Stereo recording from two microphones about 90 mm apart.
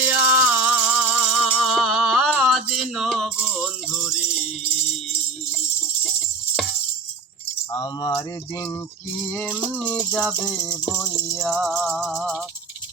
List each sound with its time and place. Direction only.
0.0 s music: 15° right (ahead or behind)
7.7 s keys jangling: 45° left (ahead or behind)
9.2 s music: 15° left (ahead or behind)
10.6 s music: 25° right (ahead or behind)
11.3 s music: 5° left (ahead or behind)